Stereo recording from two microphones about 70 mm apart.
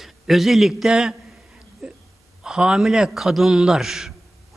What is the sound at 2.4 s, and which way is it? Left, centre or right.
A man's voice, centre.